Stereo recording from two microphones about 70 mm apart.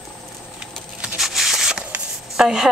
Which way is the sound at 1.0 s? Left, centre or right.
Centre.